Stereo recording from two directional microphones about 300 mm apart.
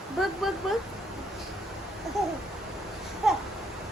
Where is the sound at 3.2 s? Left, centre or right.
Centre.